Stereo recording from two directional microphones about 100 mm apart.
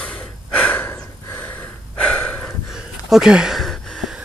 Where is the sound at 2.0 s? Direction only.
15° left (ahead or behind).